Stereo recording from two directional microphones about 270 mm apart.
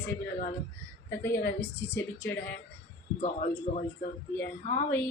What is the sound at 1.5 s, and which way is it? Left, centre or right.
Speech, centre.